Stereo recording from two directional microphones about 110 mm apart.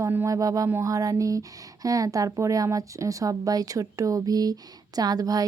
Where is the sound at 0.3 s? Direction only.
30° right (ahead or behind).